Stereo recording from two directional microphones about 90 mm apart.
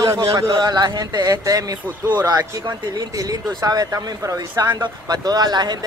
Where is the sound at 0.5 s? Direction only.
55° right (ahead or behind).